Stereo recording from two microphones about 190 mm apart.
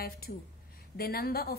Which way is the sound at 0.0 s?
50° left (ahead or behind).